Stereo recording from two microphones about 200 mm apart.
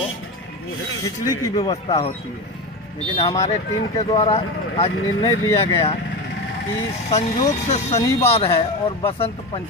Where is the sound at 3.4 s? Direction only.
35° left (ahead or behind).